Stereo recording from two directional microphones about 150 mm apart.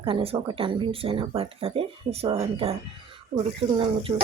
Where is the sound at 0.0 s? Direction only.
35° right (ahead or behind).